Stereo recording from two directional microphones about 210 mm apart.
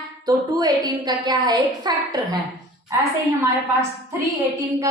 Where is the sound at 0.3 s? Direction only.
20° right (ahead or behind).